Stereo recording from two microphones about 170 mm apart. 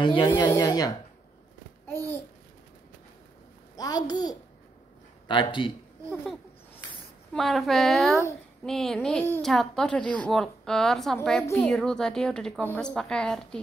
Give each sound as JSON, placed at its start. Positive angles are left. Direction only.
{"t": 0.0, "sound": "speech", "side_deg": 25}
{"t": 1.9, "sound": "babbling", "side_deg": 15}
{"t": 3.7, "sound": "a child's voice", "side_deg": 20}
{"t": 7.3, "sound": "a woman's voice", "side_deg": 0}